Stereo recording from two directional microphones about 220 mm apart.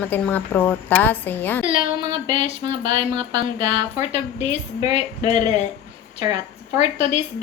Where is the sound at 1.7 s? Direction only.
20° right (ahead or behind).